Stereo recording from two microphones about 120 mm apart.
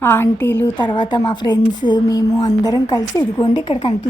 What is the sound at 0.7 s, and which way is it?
A woman's voice, 40° left (ahead or behind).